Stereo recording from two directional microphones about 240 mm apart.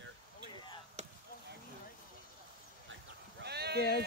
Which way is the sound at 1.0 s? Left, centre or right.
Right.